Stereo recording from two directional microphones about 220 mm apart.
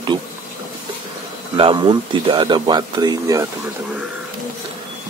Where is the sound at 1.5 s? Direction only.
25° right (ahead or behind).